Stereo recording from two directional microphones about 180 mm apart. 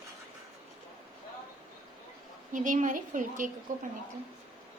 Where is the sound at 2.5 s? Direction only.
45° right (ahead or behind).